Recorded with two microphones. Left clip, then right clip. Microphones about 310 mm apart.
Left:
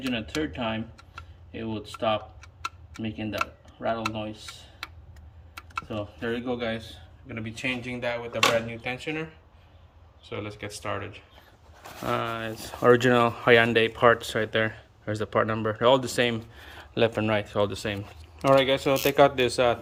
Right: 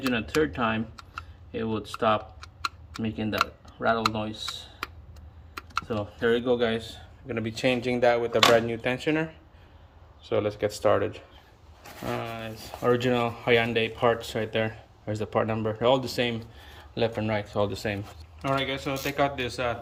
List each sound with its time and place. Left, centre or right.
0.0 s a man's voice: centre
6.1 s a man's voice: centre
12.0 s speech: centre
18.4 s speech: centre